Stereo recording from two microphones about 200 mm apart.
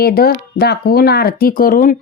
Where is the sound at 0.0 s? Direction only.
50° left (ahead or behind).